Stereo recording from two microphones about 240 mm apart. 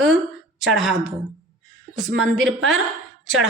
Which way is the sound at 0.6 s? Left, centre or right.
Centre.